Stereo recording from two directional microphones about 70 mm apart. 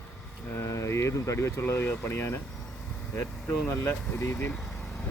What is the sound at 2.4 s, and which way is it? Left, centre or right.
Air conditioning, centre.